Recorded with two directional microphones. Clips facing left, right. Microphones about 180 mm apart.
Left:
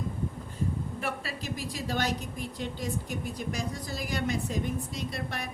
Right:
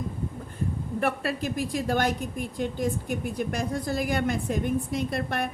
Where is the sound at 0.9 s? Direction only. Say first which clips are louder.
Right 8 dB; 60° right (ahead or behind).